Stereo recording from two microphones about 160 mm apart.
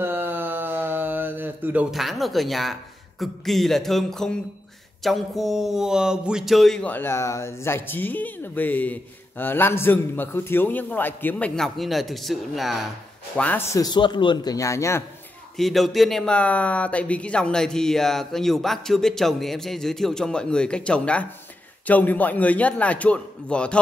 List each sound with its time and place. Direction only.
0.0 s a sound: 15° right (ahead or behind); by 4.4 s centre (ahead or behind)
5.0 s speech: centre (ahead or behind)
13.4 s a man's voice: 10° left (ahead or behind)
15.5 s speech: centre (ahead or behind)